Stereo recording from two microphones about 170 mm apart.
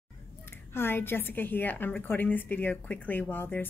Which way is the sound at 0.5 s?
15° left (ahead or behind).